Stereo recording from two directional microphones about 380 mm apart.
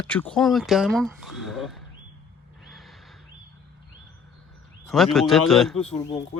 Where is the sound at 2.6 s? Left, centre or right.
Centre.